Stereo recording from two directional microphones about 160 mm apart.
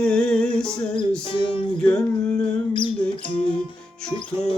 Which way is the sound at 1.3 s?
35° left (ahead or behind).